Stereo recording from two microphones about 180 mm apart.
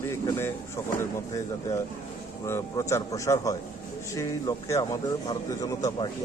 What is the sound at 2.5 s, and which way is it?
A man's voice, 15° left (ahead or behind).